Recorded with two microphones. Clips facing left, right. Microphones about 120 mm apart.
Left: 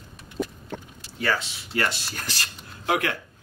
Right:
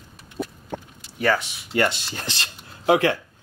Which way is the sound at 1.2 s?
20° right (ahead or behind).